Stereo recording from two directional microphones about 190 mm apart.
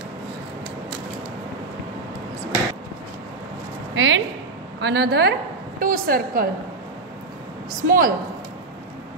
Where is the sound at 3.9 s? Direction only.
75° right (ahead or behind).